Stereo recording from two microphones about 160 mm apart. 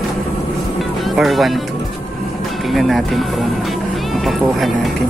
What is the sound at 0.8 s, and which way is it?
Music, centre (ahead or behind).